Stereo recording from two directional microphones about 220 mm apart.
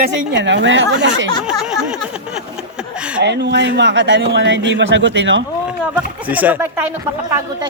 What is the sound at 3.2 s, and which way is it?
A man's voice, 50° right (ahead or behind).